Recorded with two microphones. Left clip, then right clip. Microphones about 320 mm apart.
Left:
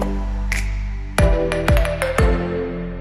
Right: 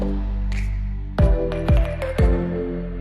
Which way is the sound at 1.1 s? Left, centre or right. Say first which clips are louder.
Left 5 dB; left.